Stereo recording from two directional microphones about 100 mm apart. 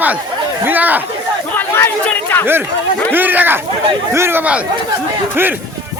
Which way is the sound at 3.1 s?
20° right (ahead or behind).